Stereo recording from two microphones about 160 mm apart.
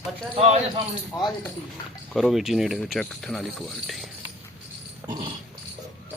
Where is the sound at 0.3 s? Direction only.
45° right (ahead or behind).